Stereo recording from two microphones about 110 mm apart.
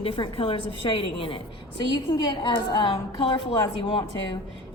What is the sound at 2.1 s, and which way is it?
A woman's voice, 45° left (ahead or behind).